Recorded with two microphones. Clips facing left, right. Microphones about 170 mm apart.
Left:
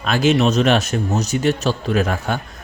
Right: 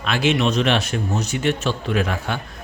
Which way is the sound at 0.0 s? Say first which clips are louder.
Left 4 dB; 40° left (ahead or behind).